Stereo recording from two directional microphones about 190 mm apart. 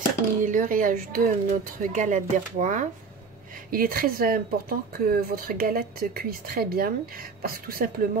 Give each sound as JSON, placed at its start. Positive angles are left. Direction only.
{"t": 0.4, "sound": "speech", "side_deg": -45}